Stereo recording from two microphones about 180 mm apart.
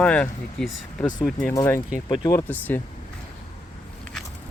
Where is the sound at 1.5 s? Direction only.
15° left (ahead or behind).